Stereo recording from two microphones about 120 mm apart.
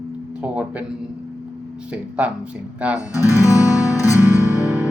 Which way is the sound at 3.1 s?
25° left (ahead or behind).